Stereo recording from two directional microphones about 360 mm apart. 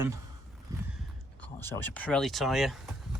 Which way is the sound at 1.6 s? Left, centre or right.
Centre.